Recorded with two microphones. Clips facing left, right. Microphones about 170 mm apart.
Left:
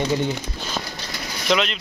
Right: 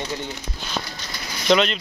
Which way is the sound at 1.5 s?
Centre (ahead or behind).